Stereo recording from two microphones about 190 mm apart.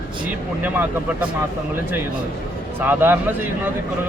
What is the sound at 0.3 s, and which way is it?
Speech, 10° right (ahead or behind).